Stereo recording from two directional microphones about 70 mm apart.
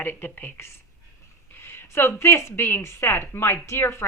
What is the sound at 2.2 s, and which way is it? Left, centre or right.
A woman's voice, left.